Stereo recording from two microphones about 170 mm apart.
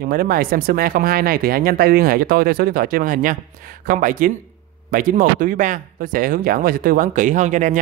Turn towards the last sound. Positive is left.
turn(degrees=-45)  # may be behind; listen again after turning